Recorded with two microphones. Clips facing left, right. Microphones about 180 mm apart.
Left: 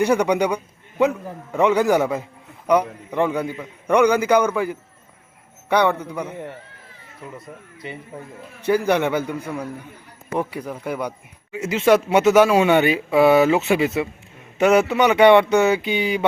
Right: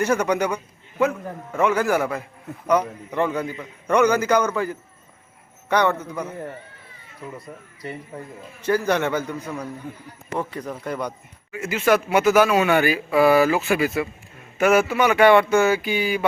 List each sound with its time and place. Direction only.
0.0 s a man's voice: 15° left (ahead or behind)
8.6 s a man's voice: 15° left (ahead or behind)
11.5 s speech: 25° left (ahead or behind)